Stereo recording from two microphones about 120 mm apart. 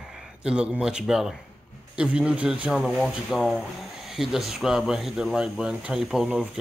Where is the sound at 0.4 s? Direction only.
5° right (ahead or behind).